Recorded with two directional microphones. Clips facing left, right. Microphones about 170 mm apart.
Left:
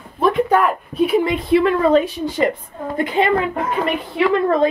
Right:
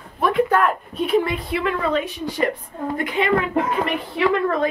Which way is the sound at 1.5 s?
30° left (ahead or behind).